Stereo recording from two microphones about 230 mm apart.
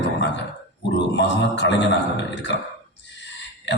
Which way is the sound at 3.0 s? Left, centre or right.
Left.